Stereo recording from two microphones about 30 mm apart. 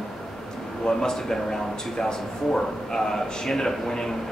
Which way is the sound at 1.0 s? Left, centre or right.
Centre.